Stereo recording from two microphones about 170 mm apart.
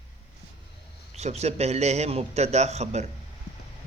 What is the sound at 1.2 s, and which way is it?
A man's voice, 40° right (ahead or behind).